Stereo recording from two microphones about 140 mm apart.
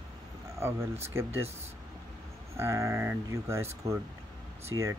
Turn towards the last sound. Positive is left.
turn(degrees=-20)  # may be behind; listen again after turning